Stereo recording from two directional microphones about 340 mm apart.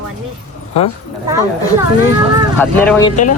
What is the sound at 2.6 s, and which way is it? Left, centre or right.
Speech, centre.